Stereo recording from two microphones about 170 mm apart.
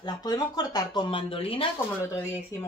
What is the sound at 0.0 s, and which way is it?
Speech, 25° left (ahead or behind).